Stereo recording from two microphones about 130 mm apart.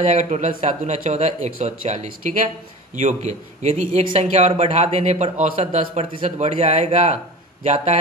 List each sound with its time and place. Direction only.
0.0 s speech: 65° right (ahead or behind)